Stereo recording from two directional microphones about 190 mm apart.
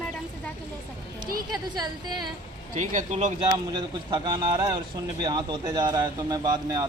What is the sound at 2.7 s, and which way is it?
Speech, 40° right (ahead or behind).